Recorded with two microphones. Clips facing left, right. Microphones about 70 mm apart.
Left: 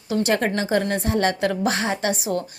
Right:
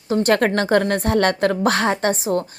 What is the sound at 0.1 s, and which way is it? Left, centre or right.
A woman's voice, right.